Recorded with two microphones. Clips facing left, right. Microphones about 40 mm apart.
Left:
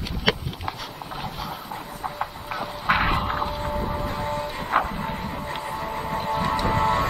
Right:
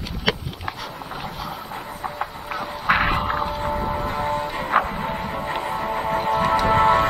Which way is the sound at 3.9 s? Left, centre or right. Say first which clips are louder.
Right 4 dB; right.